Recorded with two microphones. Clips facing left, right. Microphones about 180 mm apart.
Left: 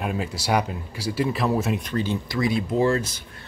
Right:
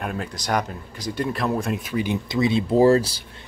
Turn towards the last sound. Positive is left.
turn(degrees=-35)  # may be behind; listen again after turning